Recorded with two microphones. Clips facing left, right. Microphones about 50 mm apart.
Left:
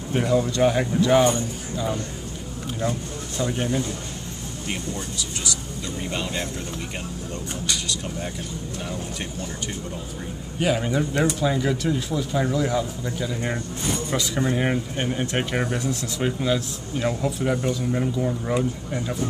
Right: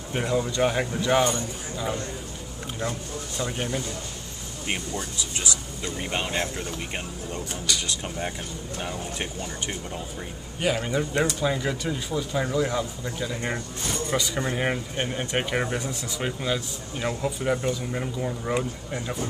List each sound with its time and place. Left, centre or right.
0.1 s speech: centre
2.8 s speech: centre
4.9 s speech: right
10.6 s speech: centre